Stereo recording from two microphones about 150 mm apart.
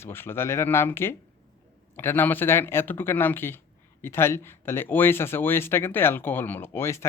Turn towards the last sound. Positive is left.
turn(degrees=15)  # may be behind; listen again after turning